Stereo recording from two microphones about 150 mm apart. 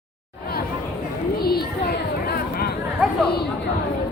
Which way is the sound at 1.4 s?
90° left.